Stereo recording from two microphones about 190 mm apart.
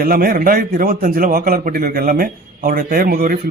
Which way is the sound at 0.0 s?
50° right (ahead or behind).